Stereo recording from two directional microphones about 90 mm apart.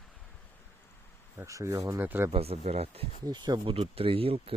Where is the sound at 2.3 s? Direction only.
90° right.